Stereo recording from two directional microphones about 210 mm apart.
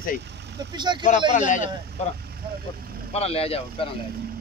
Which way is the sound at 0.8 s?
20° right (ahead or behind).